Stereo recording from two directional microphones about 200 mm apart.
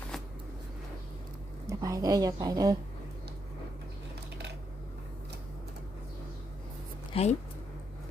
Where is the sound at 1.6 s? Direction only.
15° right (ahead or behind).